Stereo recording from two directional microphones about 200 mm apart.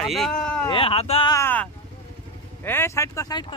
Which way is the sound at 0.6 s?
25° left (ahead or behind).